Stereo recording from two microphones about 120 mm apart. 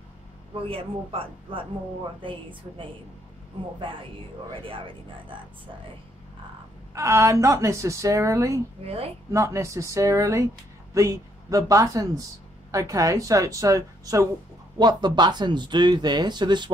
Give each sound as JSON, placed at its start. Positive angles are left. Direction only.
{"t": 0.6, "sound": "speech", "side_deg": -50}
{"t": 4.5, "sound": "speech", "side_deg": -45}
{"t": 6.9, "sound": "speech", "side_deg": -25}
{"t": 8.8, "sound": "a woman's voice", "side_deg": -55}
{"t": 9.3, "sound": "speech", "side_deg": -25}